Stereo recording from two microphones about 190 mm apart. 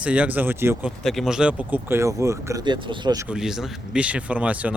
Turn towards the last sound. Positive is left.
turn(degrees=-5)  # may be behind; listen again after turning